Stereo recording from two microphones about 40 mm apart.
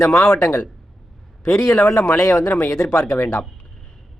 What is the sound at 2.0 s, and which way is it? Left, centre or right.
Speech, left.